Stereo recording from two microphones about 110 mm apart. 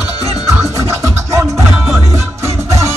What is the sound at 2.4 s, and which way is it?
Music, 25° right (ahead or behind).